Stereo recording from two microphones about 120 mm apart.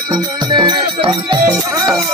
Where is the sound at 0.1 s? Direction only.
35° right (ahead or behind).